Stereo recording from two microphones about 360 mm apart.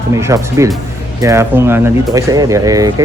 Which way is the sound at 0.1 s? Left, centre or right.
Centre.